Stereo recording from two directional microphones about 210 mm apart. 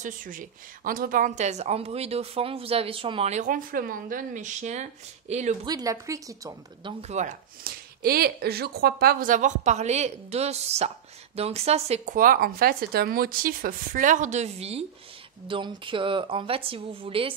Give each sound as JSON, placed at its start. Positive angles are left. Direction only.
{"t": 0.0, "sound": "speech", "side_deg": -40}
{"t": 5.7, "sound": "speech", "side_deg": -15}